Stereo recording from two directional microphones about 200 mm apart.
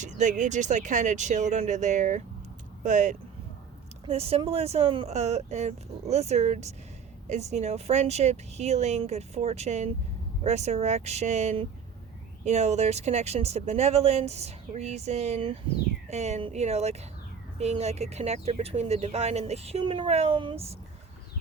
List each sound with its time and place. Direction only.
0.0 s speech: 35° right (ahead or behind)